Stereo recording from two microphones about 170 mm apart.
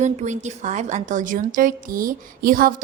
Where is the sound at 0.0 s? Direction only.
45° right (ahead or behind).